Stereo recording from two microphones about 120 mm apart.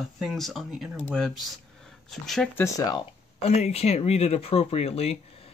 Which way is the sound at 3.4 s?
65° left (ahead or behind).